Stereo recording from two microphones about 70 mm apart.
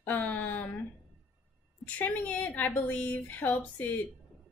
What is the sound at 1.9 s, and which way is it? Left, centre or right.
A woman's voice, left.